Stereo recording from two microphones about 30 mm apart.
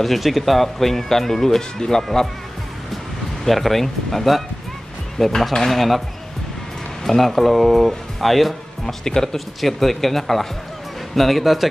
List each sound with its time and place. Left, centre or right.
0.0 s speech: centre; by 2.0 s left
3.4 s speech: centre
7.1 s speech: centre
9.0 s speech: centre
9.6 s speech: centre